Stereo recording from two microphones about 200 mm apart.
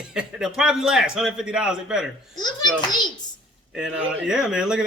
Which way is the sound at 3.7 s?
5° right (ahead or behind).